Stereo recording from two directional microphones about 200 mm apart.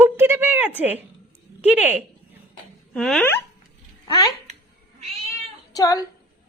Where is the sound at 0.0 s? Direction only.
10° right (ahead or behind).